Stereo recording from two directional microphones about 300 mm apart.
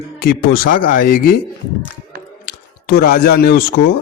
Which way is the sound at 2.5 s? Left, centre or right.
Left.